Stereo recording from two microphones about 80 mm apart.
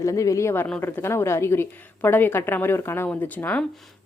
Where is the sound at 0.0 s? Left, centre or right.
Left.